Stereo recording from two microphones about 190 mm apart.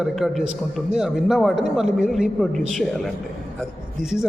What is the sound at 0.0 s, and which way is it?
A man's voice, centre (ahead or behind).